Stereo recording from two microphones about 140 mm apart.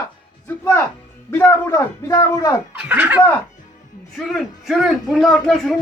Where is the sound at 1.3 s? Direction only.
20° left (ahead or behind).